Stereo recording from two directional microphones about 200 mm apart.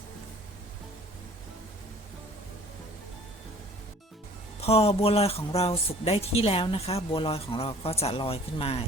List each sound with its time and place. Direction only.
4.6 s speech: 30° left (ahead or behind)